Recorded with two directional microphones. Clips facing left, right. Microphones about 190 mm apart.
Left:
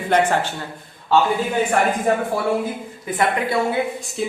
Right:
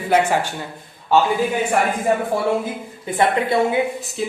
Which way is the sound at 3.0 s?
25° right (ahead or behind).